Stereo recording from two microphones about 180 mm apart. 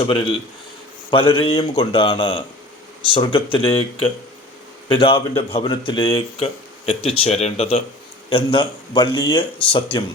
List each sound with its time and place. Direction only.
0.0 s speech: 30° left (ahead or behind)